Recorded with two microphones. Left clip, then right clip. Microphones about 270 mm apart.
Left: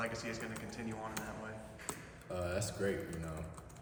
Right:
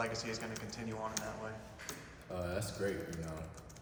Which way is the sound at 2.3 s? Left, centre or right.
Centre.